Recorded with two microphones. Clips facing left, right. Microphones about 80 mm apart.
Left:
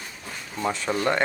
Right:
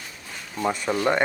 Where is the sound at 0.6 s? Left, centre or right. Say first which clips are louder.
Right 2 dB; centre.